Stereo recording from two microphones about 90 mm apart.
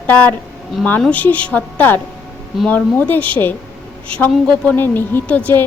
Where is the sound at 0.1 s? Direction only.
20° left (ahead or behind).